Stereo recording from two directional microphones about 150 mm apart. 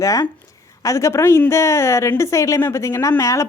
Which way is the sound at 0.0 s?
20° left (ahead or behind).